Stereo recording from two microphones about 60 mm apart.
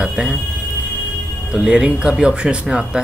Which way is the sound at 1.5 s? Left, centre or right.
Centre.